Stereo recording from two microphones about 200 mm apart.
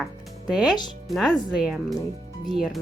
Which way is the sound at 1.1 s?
Centre (ahead or behind).